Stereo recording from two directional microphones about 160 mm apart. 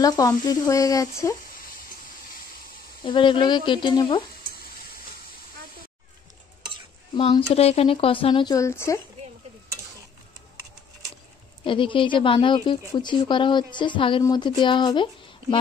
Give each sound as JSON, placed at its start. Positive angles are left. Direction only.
{"t": 0.0, "sound": "speech", "side_deg": 25}
{"t": 3.0, "sound": "speech", "side_deg": 30}
{"t": 7.2, "sound": "speech", "side_deg": 35}
{"t": 11.6, "sound": "speech", "side_deg": 30}